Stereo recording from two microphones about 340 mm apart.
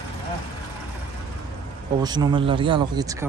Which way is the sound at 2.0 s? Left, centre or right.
Centre.